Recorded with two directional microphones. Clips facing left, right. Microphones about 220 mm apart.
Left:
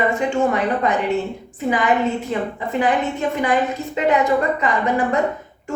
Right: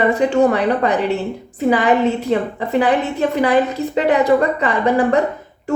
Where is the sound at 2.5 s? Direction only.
35° right (ahead or behind).